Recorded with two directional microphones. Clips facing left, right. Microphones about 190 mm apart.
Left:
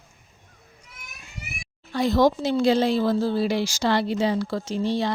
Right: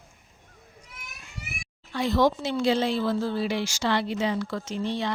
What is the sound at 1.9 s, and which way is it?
Speech, 40° left (ahead or behind).